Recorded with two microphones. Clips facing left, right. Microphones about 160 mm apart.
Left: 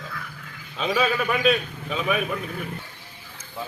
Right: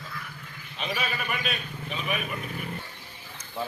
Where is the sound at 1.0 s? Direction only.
90° left.